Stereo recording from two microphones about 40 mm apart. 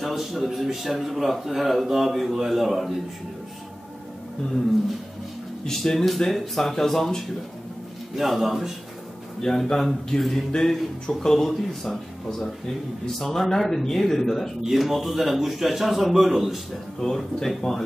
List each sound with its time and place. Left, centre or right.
0.0 s speech: centre
5.7 s speech: centre
8.2 s speech: centre
9.4 s speech: centre
10.1 s a sound: centre
10.5 s speech: centre
17.0 s speech: centre